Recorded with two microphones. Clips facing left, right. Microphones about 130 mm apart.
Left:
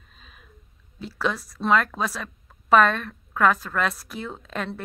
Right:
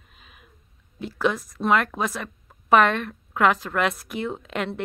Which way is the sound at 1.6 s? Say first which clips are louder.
Even; 15° right (ahead or behind).